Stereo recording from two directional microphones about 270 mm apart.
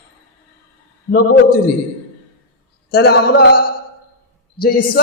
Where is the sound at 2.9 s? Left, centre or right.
Left.